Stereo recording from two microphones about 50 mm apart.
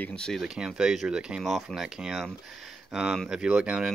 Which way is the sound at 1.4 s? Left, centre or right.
Centre.